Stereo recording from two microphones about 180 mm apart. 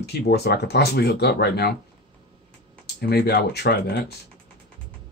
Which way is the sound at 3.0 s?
60° left (ahead or behind).